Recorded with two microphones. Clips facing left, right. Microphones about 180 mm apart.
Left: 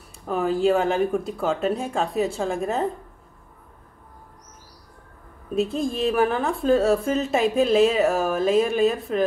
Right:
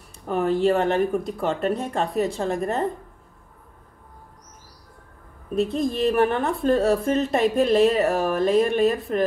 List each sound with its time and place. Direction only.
0.3 s a woman's voice: centre (ahead or behind)
5.5 s a woman's voice: centre (ahead or behind)